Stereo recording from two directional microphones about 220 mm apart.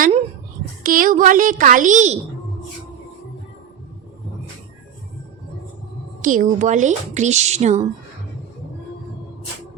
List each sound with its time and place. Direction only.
0.8 s a woman's voice: 40° right (ahead or behind)
6.2 s a woman's voice: 35° right (ahead or behind)